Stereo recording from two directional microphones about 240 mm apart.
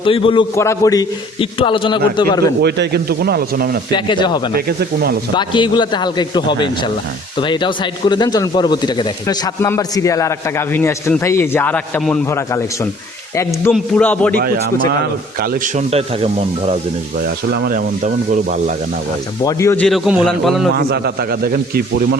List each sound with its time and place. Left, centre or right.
0.0 s a man's voice: left
2.6 s a man's voice: right
3.9 s a man's voice: centre
4.5 s a man's voice: right
5.3 s a man's voice: centre
15.4 s speech: right
17.5 s a man's voice: right
19.5 s a man's voice: centre
20.7 s a man's voice: right